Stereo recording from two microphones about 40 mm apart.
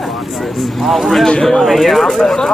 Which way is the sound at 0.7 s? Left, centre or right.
Centre.